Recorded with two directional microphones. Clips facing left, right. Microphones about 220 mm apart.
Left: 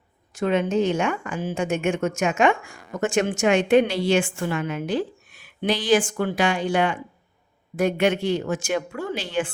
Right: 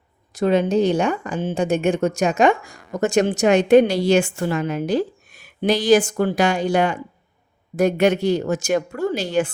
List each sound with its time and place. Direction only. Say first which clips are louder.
0.3 s a woman's voice: right 4 dB; 35° right (ahead or behind)